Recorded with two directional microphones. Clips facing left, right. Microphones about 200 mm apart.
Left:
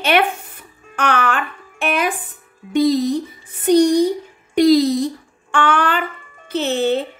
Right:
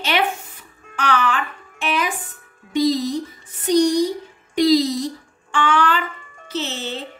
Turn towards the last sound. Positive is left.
turn(degrees=55)  # may be behind; listen again after turning